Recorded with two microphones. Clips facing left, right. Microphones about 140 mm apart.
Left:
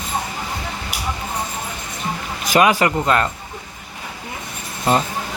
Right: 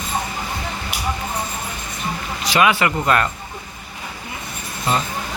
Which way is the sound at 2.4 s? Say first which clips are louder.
Left 2 dB; 45° left (ahead or behind).